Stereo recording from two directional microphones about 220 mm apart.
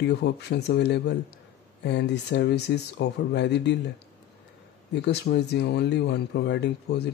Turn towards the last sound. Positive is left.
turn(degrees=50)  # may be behind; listen again after turning